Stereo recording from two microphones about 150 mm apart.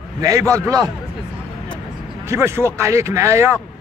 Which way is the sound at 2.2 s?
15° right (ahead or behind).